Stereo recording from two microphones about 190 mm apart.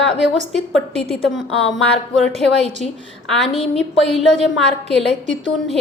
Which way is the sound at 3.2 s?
Centre (ahead or behind).